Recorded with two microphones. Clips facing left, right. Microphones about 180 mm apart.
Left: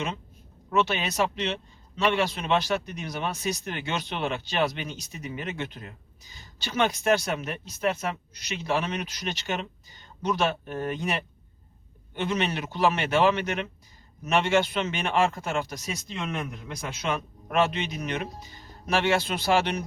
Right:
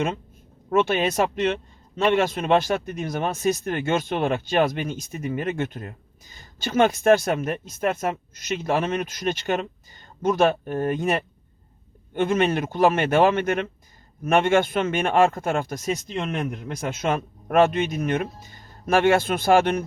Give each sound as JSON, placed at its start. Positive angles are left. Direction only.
{"t": 0.7, "sound": "speech", "side_deg": -50}